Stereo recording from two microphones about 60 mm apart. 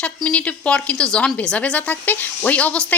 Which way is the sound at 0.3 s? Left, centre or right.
Left.